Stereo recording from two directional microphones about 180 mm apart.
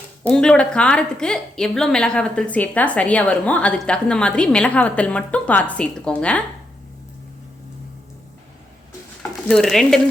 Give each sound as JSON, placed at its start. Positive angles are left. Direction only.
{"t": 0.3, "sound": "a woman's voice", "side_deg": 5}
{"t": 9.5, "sound": "a woman's voice", "side_deg": 0}